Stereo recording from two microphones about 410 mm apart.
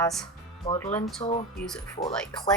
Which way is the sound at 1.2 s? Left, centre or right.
Centre.